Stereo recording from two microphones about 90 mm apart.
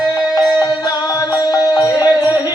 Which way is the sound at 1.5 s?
40° left (ahead or behind).